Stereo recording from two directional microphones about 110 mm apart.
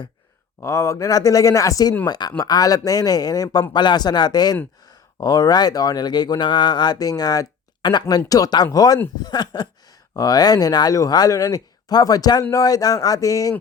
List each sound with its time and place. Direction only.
0.6 s speech: 25° left (ahead or behind)